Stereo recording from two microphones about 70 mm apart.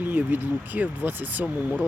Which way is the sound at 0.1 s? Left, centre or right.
Right.